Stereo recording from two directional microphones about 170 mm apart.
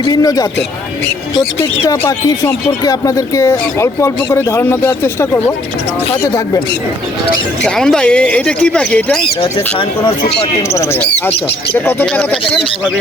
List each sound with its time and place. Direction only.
0.1 s speech: 20° left (ahead or behind)
7.6 s speech: 5° left (ahead or behind)
10.8 s speech: 10° left (ahead or behind)